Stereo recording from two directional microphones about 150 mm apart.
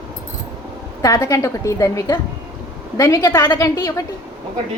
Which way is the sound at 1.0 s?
20° left (ahead or behind).